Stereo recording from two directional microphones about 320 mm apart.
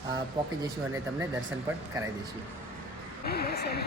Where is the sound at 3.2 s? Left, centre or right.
Left.